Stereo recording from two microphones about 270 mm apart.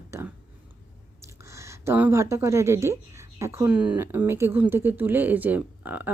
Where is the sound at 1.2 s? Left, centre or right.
Centre.